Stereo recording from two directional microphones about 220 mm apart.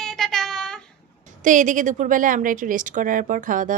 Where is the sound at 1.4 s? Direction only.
35° right (ahead or behind).